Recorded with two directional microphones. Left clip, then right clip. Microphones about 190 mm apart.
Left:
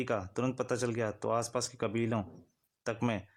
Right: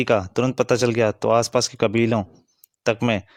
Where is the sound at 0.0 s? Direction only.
35° right (ahead or behind).